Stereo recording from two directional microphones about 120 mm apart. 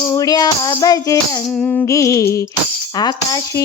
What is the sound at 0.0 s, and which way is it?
Music, 30° left (ahead or behind).